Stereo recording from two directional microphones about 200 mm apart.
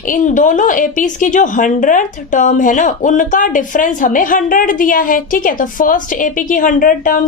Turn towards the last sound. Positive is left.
turn(degrees=40)  # may be behind; listen again after turning